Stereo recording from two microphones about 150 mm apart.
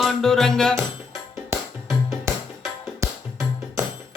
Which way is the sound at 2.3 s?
15° right (ahead or behind).